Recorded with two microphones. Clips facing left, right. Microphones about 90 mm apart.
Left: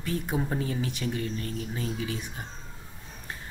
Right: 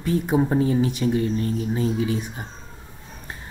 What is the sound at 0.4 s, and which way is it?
Speech, 25° right (ahead or behind).